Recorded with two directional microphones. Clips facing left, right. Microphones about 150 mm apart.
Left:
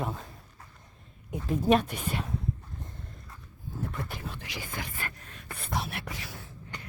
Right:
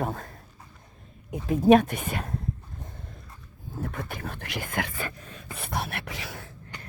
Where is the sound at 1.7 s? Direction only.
55° right (ahead or behind).